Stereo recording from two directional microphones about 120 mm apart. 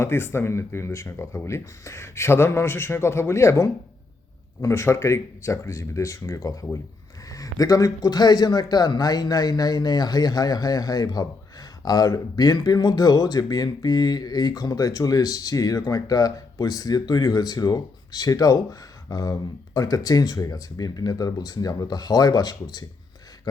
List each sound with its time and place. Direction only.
0.0 s speech: 20° left (ahead or behind)